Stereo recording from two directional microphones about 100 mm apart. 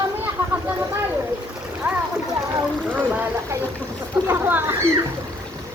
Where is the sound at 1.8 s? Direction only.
20° right (ahead or behind).